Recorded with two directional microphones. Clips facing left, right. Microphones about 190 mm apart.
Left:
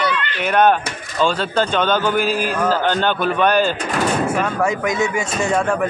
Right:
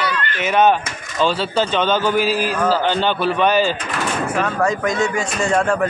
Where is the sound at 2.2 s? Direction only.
50° left (ahead or behind).